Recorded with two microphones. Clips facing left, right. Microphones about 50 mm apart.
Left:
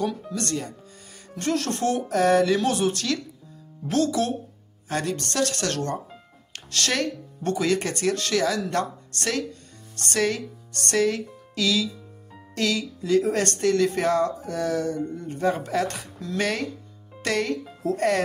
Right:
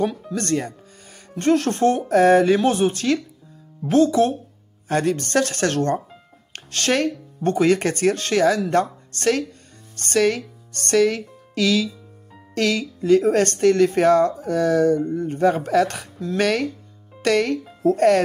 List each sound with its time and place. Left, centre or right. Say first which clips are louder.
0.3 s speech: right 6 dB; right
4.8 s speech: right 6 dB; right